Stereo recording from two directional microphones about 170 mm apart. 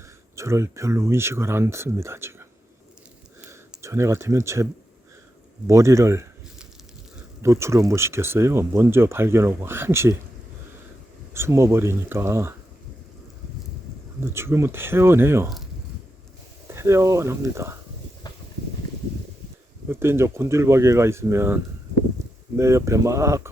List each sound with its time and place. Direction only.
0.3 s speech: 15° right (ahead or behind)
3.5 s speech: 15° right (ahead or behind)
7.4 s speech: 15° right (ahead or behind)
11.3 s speech: 15° right (ahead or behind)
14.2 s speech: 15° right (ahead or behind)
16.6 s speech: 15° right (ahead or behind)
19.9 s speech: 15° right (ahead or behind)